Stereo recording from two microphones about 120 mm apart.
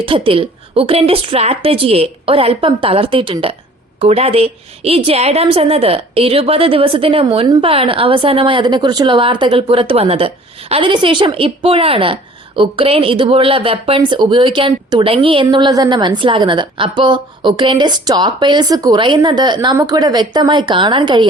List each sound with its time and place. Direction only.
0.0 s a woman's voice: 45° right (ahead or behind)
4.0 s a woman's voice: 60° right (ahead or behind); by 21.2 s 40° right (ahead or behind)